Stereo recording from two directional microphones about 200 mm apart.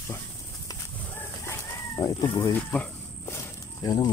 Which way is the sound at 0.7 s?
15° left (ahead or behind).